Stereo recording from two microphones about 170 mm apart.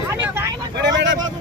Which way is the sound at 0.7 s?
90° right.